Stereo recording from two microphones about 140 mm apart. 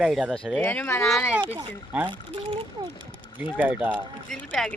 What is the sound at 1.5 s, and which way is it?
Speech, 15° right (ahead or behind).